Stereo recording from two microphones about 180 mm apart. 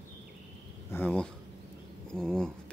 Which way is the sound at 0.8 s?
10° left (ahead or behind).